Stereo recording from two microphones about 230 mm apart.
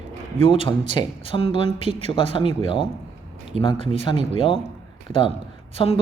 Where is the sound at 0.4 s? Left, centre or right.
Left.